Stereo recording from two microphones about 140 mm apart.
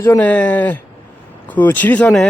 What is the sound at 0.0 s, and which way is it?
Speech, 15° left (ahead or behind).